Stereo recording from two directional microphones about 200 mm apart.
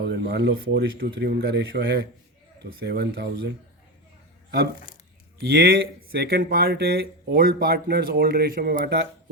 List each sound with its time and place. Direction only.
0.0 s speech: 60° right (ahead or behind)
5.4 s speech: 55° right (ahead or behind)